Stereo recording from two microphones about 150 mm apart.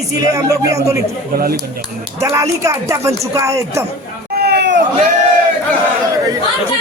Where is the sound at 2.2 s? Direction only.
20° right (ahead or behind).